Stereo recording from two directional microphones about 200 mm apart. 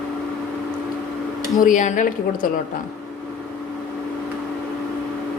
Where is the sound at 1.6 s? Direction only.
40° left (ahead or behind).